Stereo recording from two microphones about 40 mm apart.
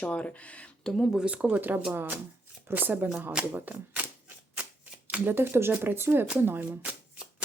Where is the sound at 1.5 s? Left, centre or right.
Right.